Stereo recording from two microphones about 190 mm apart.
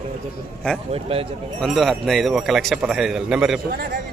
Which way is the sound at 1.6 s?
Centre (ahead or behind).